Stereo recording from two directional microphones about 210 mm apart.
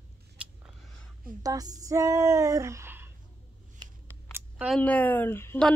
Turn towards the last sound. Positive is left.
turn(degrees=10)  # may be behind; listen again after turning